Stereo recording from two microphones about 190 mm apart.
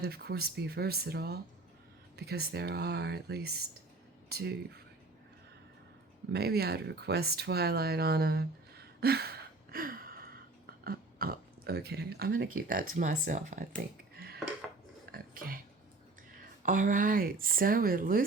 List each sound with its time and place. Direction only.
0.0 s speech: 55° right (ahead or behind)
6.3 s speech: 55° right (ahead or behind)
9.0 s a sound: 55° right (ahead or behind)
13.0 s speech: 40° right (ahead or behind)
15.1 s a sound: 50° right (ahead or behind)
16.6 s speech: 45° right (ahead or behind)